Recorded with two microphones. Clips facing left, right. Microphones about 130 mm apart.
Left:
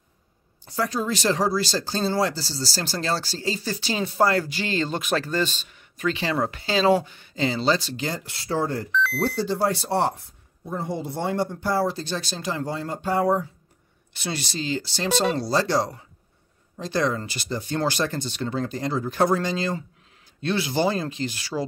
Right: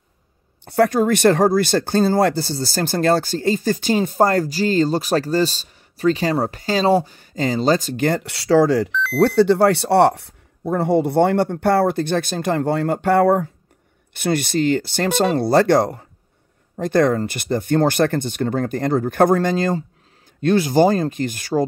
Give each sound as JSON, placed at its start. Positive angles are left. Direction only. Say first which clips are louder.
{"t": 0.7, "sound": "speech", "louder": "right 10 dB", "side_deg": -60}
{"t": 9.2, "sound": "speech", "louder": "right 13 dB", "side_deg": -70}